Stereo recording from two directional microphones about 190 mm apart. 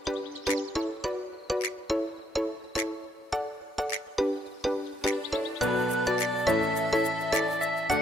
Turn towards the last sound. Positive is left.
turn(degrees=0)  # may be behind; listen again after turning